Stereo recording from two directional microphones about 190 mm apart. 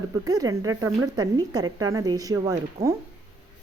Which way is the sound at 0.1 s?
20° right (ahead or behind).